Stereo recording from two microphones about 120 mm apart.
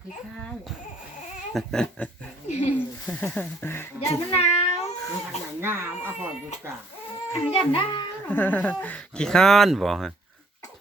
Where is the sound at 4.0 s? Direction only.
60° left (ahead or behind).